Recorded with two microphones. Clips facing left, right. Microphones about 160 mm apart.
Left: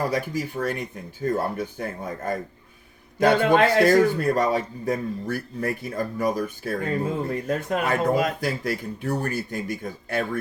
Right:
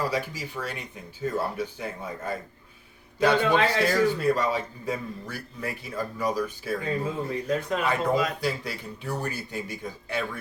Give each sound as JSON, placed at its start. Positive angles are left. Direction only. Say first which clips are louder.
{"t": 0.1, "sound": "a man's voice", "louder": "left 4 dB", "side_deg": 50}